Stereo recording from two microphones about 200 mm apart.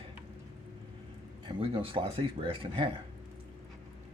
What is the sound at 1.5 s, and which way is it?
Speech, 25° right (ahead or behind).